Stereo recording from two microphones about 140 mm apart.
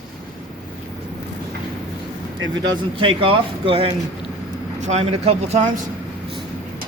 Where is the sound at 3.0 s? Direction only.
40° right (ahead or behind).